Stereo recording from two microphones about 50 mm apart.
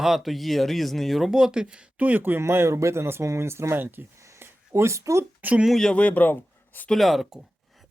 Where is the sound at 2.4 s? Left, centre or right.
Right.